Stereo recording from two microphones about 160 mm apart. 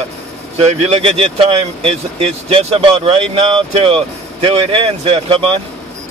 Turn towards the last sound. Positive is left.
turn(degrees=-35)  # may be behind; listen again after turning